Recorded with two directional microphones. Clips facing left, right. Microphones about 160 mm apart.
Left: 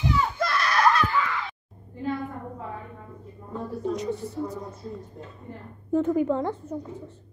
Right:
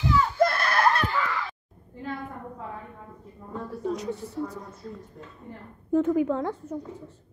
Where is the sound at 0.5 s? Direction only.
55° right (ahead or behind).